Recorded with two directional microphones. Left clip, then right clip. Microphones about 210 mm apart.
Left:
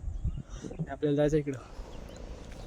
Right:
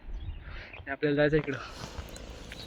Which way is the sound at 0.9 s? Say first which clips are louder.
Right 2 dB; 15° left (ahead or behind).